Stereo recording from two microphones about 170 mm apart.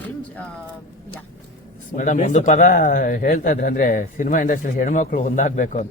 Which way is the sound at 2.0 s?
45° left (ahead or behind).